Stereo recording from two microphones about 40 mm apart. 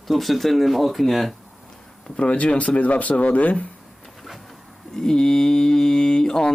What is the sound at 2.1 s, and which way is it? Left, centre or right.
Speech, left.